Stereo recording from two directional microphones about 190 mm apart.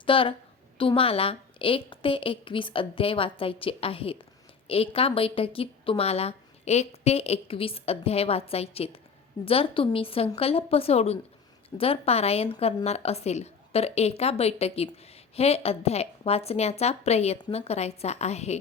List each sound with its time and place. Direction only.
0.0 s a woman's voice: 25° left (ahead or behind)